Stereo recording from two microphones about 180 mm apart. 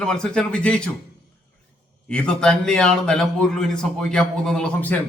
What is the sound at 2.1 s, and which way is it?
A man's voice, 5° left (ahead or behind).